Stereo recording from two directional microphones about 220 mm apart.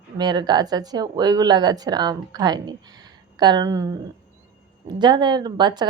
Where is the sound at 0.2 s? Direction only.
20° right (ahead or behind).